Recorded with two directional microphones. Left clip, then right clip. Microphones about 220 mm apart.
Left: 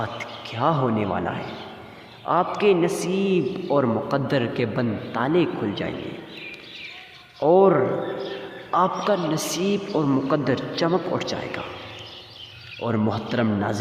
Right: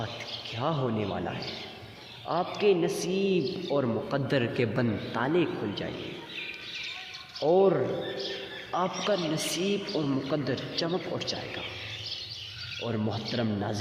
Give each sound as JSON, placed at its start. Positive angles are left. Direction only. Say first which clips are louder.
{"t": 0.0, "sound": "a man's voice", "louder": "left 6 dB", "side_deg": 30}
{"t": 7.4, "sound": "a man's voice", "louder": "left 7 dB", "side_deg": 35}
{"t": 12.8, "sound": "a man's voice", "louder": "left 9 dB", "side_deg": 35}